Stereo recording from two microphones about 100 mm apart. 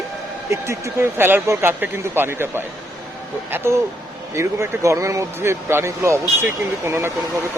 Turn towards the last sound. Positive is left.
turn(degrees=-25)  # may be behind; listen again after turning